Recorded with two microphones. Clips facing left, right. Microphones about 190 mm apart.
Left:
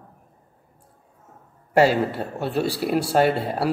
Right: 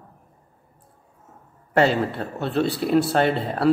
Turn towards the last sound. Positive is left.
turn(degrees=10)  # may be behind; listen again after turning